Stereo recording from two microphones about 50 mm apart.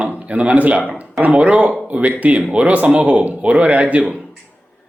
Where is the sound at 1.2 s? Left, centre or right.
Right.